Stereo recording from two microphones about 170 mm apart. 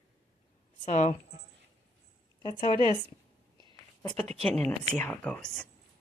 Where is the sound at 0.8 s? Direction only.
45° left (ahead or behind).